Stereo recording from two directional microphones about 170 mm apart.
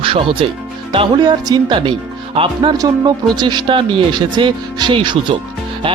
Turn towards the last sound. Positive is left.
turn(degrees=-30)  # may be behind; listen again after turning